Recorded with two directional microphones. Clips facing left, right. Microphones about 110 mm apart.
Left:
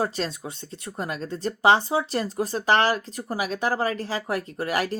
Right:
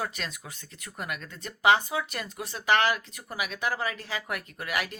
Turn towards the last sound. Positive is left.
turn(degrees=35)  # may be behind; listen again after turning